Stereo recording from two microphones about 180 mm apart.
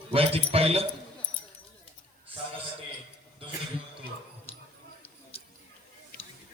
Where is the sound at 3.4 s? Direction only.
30° right (ahead or behind).